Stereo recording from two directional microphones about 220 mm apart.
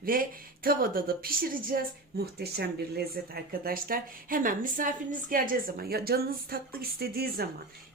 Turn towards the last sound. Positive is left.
turn(degrees=-45)  # may be behind; listen again after turning